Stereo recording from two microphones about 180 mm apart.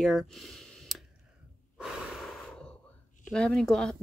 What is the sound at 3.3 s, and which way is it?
Speech, 5° left (ahead or behind).